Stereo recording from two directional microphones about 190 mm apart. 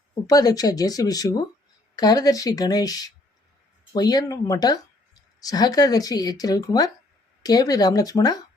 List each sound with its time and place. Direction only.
0.3 s speech: 20° left (ahead or behind)